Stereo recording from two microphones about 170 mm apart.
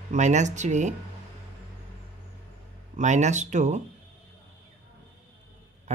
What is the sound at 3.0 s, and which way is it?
Speech, 45° right (ahead or behind).